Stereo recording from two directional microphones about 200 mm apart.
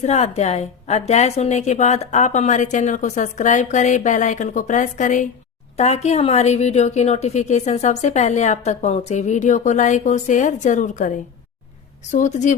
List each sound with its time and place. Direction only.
0.0 s a woman's voice: 35° left (ahead or behind)
12.1 s a woman's voice: 40° left (ahead or behind)